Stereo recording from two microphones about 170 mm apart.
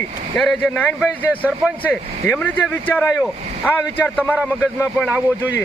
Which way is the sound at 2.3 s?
10° left (ahead or behind).